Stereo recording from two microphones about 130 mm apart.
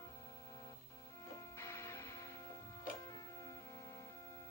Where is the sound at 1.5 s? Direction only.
20° left (ahead or behind).